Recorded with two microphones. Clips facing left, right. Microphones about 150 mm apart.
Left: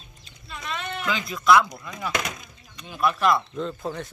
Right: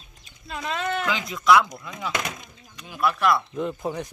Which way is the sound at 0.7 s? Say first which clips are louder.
Right 7 dB; 90° right.